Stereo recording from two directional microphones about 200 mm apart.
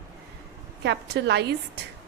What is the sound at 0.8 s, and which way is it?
Speech, 55° right (ahead or behind).